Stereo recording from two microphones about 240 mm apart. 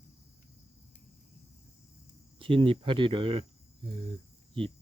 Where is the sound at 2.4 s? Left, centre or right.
Right.